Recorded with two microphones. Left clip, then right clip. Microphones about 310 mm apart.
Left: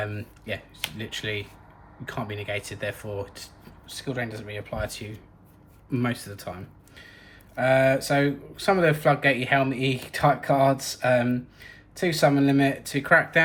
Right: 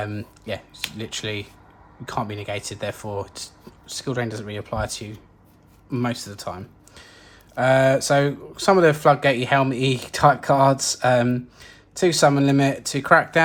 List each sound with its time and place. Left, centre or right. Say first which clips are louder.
0.0 s speech: right 2 dB; centre